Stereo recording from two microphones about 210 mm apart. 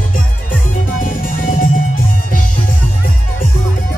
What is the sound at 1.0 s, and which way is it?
Music, 40° left (ahead or behind).